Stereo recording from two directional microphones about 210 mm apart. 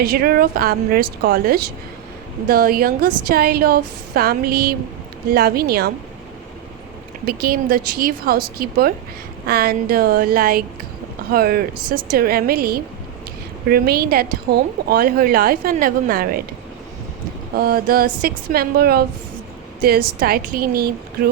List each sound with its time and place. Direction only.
0.0 s a woman's voice: 45° right (ahead or behind)
7.4 s a woman's voice: 45° right (ahead or behind)
17.6 s a woman's voice: 45° right (ahead or behind)